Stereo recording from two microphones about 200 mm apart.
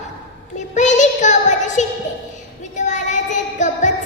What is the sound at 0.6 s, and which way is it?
Child singing, 35° left (ahead or behind).